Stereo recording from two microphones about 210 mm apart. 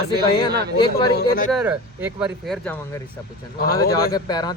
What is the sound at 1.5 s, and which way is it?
Speech, centre (ahead or behind).